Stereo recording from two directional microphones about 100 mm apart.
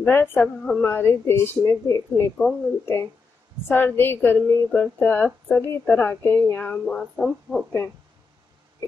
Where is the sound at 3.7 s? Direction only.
20° left (ahead or behind); by 7.6 s 5° left (ahead or behind).